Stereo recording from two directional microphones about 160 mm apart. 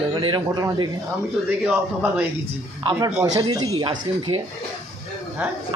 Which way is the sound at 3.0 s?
20° right (ahead or behind).